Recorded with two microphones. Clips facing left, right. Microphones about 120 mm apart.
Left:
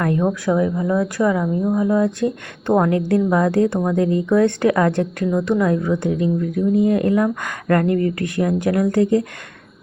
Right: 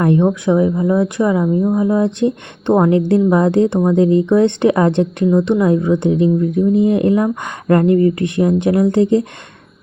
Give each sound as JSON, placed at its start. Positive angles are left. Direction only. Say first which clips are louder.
{"t": 0.0, "sound": "speech", "louder": "right 5 dB", "side_deg": -25}